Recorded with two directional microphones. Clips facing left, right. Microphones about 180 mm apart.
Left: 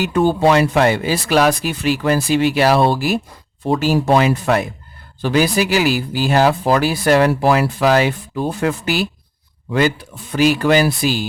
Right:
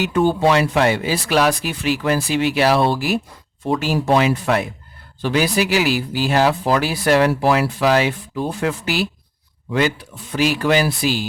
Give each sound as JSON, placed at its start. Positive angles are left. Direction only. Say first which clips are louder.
{"t": 0.1, "sound": "speech", "louder": "left 3 dB", "side_deg": 40}
{"t": 10.3, "sound": "speech", "louder": "left 3 dB", "side_deg": 45}